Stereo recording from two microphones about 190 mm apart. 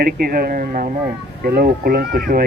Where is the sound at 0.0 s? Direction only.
55° right (ahead or behind).